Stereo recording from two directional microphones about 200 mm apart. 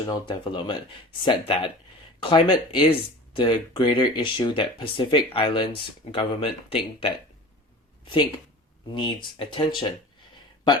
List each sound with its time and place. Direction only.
0.1 s speech: 25° left (ahead or behind)